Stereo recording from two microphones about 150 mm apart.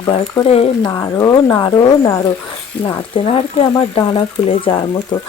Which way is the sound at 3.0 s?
40° left (ahead or behind).